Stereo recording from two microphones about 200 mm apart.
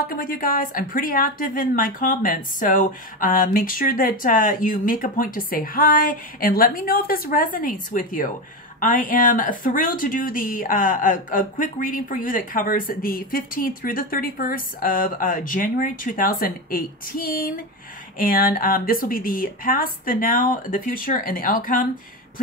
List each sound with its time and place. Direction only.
0.1 s speech: 45° left (ahead or behind)